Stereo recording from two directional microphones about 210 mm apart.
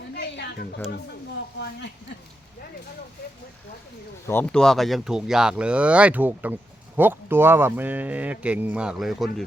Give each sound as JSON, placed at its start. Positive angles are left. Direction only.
{"t": 0.1, "sound": "a sound", "side_deg": 50}
{"t": 1.5, "sound": "speech", "side_deg": 55}
{"t": 4.3, "sound": "speech", "side_deg": 10}